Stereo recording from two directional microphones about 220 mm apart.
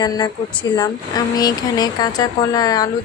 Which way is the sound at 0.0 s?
20° left (ahead or behind).